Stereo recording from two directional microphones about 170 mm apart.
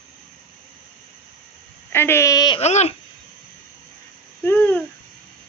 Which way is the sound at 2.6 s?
40° left (ahead or behind).